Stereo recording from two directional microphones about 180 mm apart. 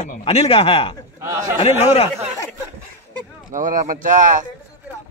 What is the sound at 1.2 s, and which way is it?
Speech, 15° right (ahead or behind).